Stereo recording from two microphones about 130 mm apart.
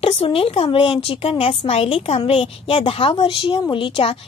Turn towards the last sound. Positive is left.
turn(degrees=45)  # may be behind; listen again after turning